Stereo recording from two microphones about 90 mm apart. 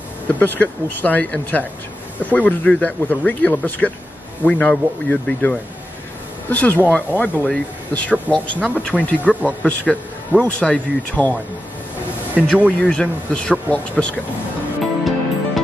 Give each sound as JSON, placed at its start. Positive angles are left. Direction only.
{"t": 0.4, "sound": "speech", "side_deg": 20}
{"t": 8.5, "sound": "speech", "side_deg": -15}
{"t": 8.8, "sound": "speech", "side_deg": 15}
{"t": 12.4, "sound": "a man's voice", "side_deg": -5}
{"t": 12.8, "sound": "speech", "side_deg": 10}
{"t": 14.8, "sound": "music", "side_deg": 0}